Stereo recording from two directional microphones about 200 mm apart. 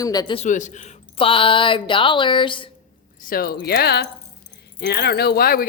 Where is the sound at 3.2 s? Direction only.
50° left (ahead or behind).